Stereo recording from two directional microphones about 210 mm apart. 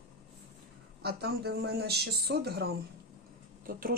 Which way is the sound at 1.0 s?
50° right (ahead or behind).